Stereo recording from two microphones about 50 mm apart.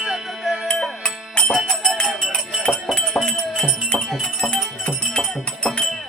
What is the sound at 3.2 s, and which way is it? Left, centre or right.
Music, centre.